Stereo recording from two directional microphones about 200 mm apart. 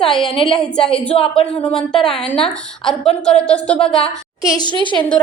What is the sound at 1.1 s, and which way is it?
Speech, 25° left (ahead or behind).